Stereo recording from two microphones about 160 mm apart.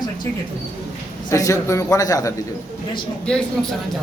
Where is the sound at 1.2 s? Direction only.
20° left (ahead or behind).